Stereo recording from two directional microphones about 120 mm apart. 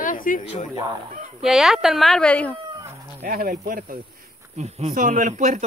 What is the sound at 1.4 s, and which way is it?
Speech, 5° right (ahead or behind).